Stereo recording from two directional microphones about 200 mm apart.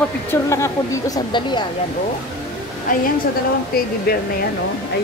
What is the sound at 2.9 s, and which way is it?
Speech, 45° left (ahead or behind).